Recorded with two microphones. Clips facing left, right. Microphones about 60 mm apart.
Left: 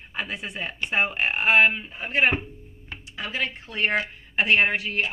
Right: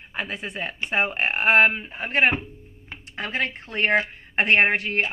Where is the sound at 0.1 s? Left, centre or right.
Right.